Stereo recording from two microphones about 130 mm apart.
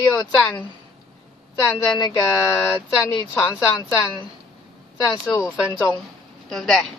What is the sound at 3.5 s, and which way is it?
Speech, 5° right (ahead or behind).